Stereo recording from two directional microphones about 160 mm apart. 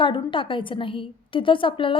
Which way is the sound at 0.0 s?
30° left (ahead or behind).